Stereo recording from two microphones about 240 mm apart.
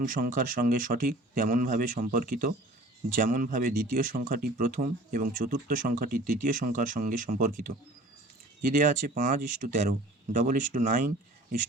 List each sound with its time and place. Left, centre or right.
0.0 s speech: right